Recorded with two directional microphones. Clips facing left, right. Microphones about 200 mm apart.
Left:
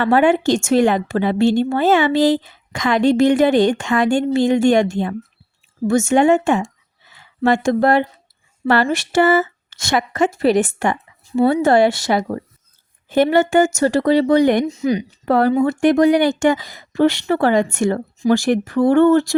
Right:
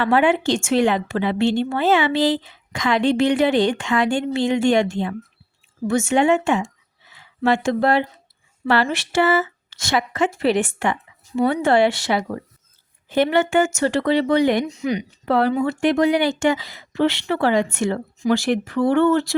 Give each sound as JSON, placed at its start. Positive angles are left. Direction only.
{"t": 0.0, "sound": "a woman's voice", "side_deg": 45}